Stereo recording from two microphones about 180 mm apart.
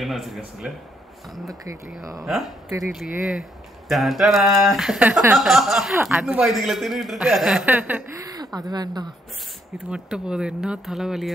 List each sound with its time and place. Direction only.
0.0 s speech: centre (ahead or behind)
2.2 s speech: centre (ahead or behind)
8.2 s speech: 20° right (ahead or behind)
9.8 s speech: 5° right (ahead or behind)